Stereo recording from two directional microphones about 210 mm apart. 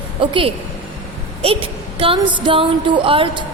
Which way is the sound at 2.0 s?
25° right (ahead or behind).